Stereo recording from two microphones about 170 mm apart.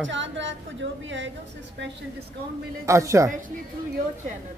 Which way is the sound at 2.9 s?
15° right (ahead or behind).